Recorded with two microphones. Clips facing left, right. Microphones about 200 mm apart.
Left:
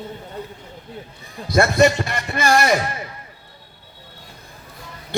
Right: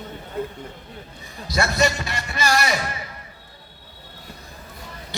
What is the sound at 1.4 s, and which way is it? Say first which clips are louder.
A man's voice: left 6 dB; 55° left (ahead or behind).